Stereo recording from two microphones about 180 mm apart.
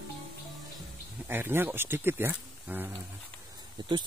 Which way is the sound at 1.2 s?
10° right (ahead or behind).